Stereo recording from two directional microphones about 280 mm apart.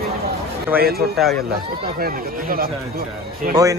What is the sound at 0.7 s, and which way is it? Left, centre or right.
Speech, right.